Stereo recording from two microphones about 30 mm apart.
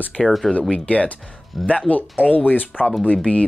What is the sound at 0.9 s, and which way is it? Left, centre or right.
Speech, left.